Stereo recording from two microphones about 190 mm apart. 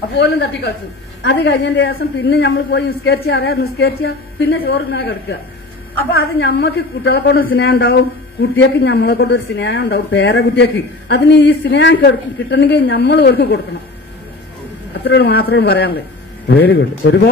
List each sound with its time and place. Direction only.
0.1 s a man's voice: 60° left (ahead or behind)
15.0 s a man's voice: 65° left (ahead or behind)